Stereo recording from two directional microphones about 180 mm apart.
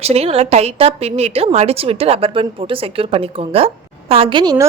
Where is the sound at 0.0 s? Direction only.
35° right (ahead or behind).